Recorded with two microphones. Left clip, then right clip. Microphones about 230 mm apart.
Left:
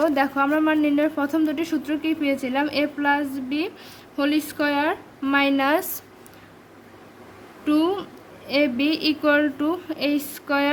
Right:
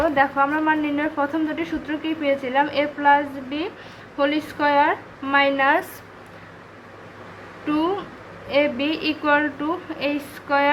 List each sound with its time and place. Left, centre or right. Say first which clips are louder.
0.0 s a woman's voice: right 2 dB; left
7.7 s a woman's voice: left 1 dB; left